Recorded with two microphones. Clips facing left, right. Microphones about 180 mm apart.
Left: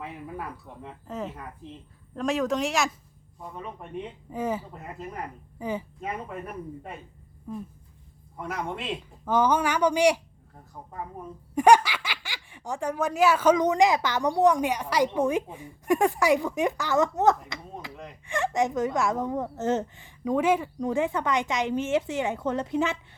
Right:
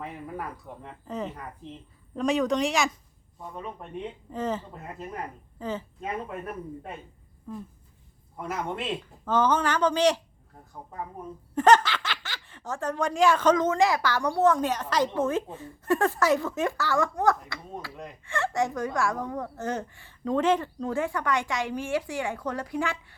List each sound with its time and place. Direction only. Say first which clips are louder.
1.0 s speech: right 1 dB; centre (ahead or behind)
4.3 s a woman's voice: left 1 dB; 10° left (ahead or behind)
7.5 s speech: left 2 dB; 15° left (ahead or behind)
8.4 s speech: right 1 dB; centre (ahead or behind)
9.2 s speech: left 1 dB; 10° left (ahead or behind)
11.5 s a woman's voice: left 1 dB; 10° left (ahead or behind)